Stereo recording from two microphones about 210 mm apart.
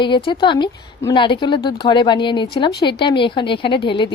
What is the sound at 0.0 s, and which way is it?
Speech, 20° left (ahead or behind).